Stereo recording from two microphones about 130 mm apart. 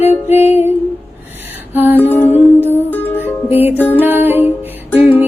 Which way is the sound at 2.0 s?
15° left (ahead or behind).